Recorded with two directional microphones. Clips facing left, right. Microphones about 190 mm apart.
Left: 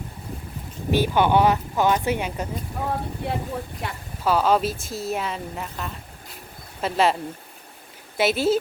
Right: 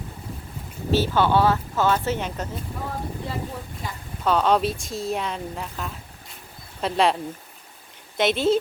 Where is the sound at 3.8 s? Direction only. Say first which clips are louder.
Left 2 dB; 65° left (ahead or behind).